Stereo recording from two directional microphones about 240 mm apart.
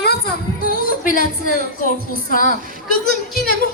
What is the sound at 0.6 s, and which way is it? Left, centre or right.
Speech, left.